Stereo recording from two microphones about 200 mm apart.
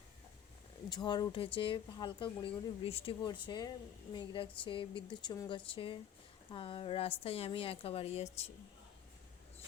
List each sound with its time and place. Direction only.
0.9 s speech: 20° left (ahead or behind)